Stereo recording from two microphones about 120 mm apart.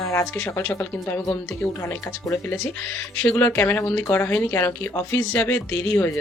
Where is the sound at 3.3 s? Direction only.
20° left (ahead or behind).